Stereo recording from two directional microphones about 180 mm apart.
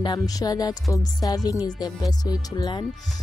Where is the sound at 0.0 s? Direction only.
20° left (ahead or behind).